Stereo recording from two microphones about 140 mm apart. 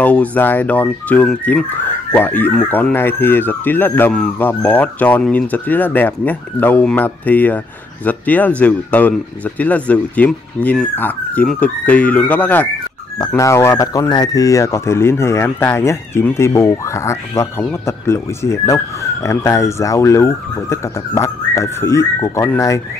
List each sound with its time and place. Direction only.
0.0 s speech: 10° left (ahead or behind)